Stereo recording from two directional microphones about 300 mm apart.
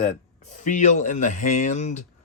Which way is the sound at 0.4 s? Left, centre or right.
Left.